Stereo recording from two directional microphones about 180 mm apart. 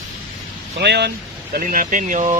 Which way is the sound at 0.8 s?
70° right (ahead or behind).